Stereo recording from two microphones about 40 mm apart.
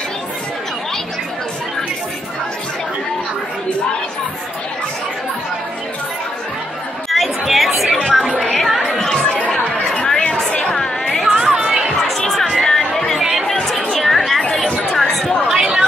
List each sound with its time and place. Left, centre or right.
7.1 s chatter: centre
8.4 s a sound: centre
8.8 s chatter: centre
9.9 s chatter: centre
10.8 s music: centre
11.3 s chatter: centre
12.3 s chatter: centre
12.6 s music: centre
13.2 s chatter: centre
13.7 s chatter: centre
15.4 s chatter: centre